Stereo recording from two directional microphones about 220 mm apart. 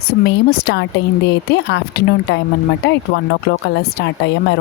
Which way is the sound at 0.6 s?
50° left (ahead or behind).